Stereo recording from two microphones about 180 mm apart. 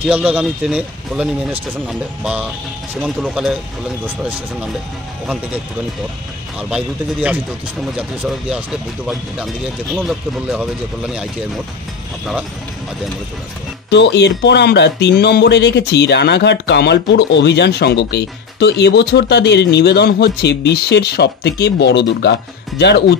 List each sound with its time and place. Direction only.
0.0 s a man's voice: 5° right (ahead or behind)
6.7 s a man's voice: 10° right (ahead or behind)
13.8 s speech: 70° left (ahead or behind)